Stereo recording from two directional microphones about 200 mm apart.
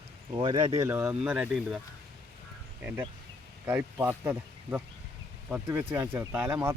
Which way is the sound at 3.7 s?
10° right (ahead or behind).